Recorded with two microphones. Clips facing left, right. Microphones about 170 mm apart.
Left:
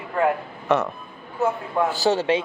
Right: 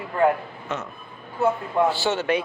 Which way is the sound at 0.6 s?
65° left (ahead or behind).